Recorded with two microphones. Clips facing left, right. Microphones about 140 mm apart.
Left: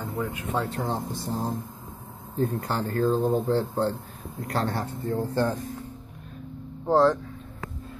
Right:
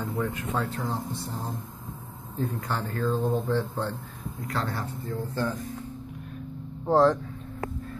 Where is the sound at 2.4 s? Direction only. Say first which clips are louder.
Left 4 dB; 30° left (ahead or behind).